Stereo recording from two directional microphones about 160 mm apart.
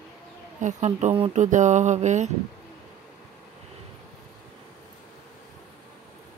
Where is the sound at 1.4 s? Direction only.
50° right (ahead or behind).